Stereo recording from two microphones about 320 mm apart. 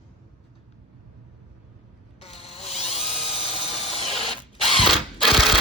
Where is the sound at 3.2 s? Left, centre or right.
Centre.